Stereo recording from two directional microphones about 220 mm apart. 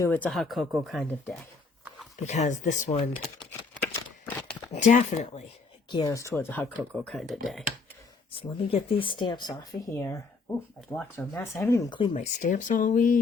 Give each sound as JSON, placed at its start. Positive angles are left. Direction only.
{"t": 0.0, "sound": "speech", "side_deg": 10}
{"t": 2.1, "sound": "speech", "side_deg": 30}
{"t": 3.2, "sound": "a sound", "side_deg": 0}
{"t": 4.7, "sound": "speech", "side_deg": 30}
{"t": 5.9, "sound": "speech", "side_deg": 15}
{"t": 8.3, "sound": "speech", "side_deg": 25}
{"t": 12.1, "sound": "speech", "side_deg": 35}